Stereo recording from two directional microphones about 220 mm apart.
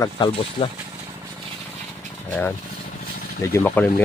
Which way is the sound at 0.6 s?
30° left (ahead or behind).